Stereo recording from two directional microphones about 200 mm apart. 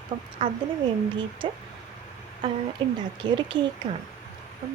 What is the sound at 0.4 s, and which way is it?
A woman's voice, 25° right (ahead or behind).